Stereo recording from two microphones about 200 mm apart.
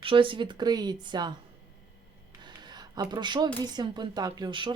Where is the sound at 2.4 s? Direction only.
20° right (ahead or behind).